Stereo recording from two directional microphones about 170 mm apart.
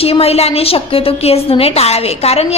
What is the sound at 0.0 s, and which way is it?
A woman's voice, 35° left (ahead or behind).